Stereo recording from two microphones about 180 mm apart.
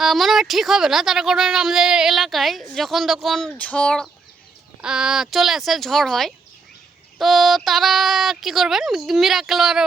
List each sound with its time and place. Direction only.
0.0 s speech: centre (ahead or behind)